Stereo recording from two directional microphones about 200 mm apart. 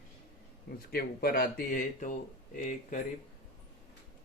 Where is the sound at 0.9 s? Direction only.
50° left (ahead or behind).